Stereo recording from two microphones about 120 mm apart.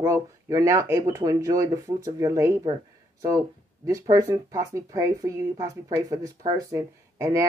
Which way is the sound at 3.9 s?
30° right (ahead or behind).